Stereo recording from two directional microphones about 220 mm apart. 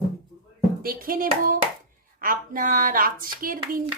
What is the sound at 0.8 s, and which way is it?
Speech, 40° right (ahead or behind).